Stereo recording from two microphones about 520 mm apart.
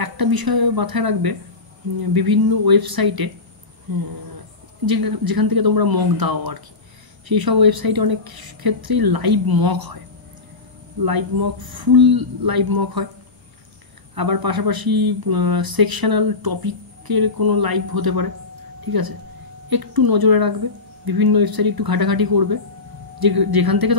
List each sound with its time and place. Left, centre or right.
0.0 s speech: right
11.1 s speech: right
14.1 s speech: right